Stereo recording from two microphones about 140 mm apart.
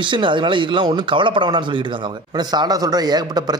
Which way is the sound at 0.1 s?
35° right (ahead or behind).